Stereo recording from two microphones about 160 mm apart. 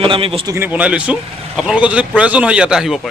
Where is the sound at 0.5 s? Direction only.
10° right (ahead or behind).